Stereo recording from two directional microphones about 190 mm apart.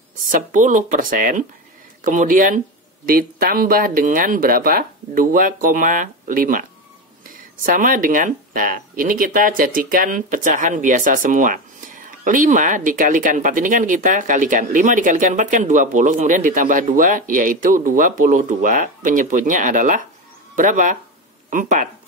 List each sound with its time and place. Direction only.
0.3 s speech: 45° right (ahead or behind)